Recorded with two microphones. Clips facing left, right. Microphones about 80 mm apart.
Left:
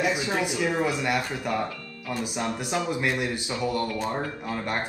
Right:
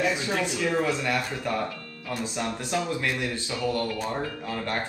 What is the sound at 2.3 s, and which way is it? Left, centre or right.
Speech, centre.